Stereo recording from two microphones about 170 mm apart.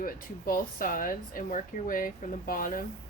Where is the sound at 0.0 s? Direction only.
55° left (ahead or behind).